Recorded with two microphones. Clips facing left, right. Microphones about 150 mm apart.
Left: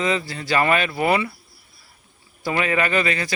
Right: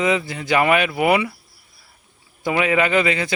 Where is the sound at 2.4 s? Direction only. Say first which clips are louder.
Right 3 dB; 15° right (ahead or behind).